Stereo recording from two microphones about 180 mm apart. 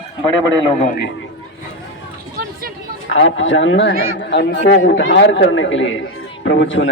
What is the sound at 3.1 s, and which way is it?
A man's voice, 90° left.